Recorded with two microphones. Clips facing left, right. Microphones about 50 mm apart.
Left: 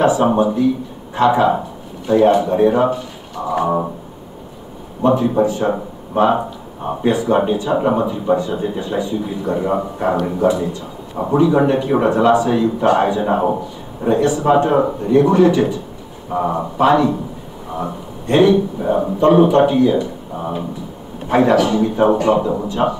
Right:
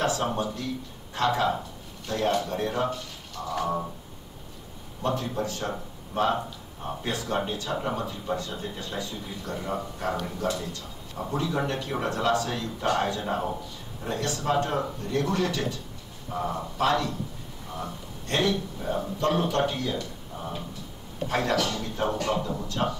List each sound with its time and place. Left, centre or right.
0.0 s a man's voice: centre
5.0 s speech: left
7.1 s speech: centre
21.3 s speech: left